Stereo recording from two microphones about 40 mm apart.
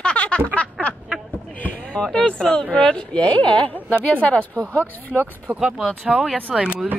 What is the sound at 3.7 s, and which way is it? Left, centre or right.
Speech, left.